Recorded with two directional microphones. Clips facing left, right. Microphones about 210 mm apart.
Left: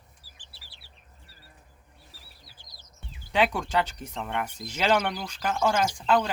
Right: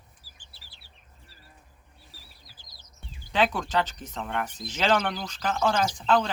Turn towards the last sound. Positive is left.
turn(degrees=10)  # may be behind; listen again after turning